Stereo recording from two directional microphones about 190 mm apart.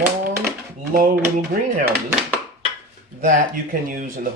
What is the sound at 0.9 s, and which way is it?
Speech, 50° right (ahead or behind).